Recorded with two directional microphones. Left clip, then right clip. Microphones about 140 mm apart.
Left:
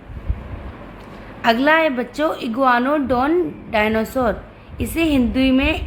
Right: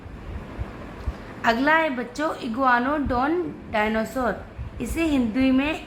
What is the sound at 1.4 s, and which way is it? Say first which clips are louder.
A woman's voice: left 5 dB; 40° left (ahead or behind).